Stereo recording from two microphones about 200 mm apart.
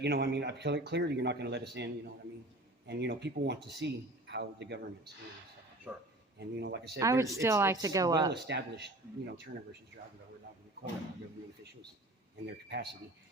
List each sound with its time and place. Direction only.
0.0 s a man's voice: 55° right (ahead or behind)
5.9 s speech: 5° right (ahead or behind)
6.6 s a man's voice: 55° right (ahead or behind)
7.0 s speech: 15° right (ahead or behind)
8.3 s a man's voice: 55° right (ahead or behind)
12.5 s a man's voice: 60° right (ahead or behind)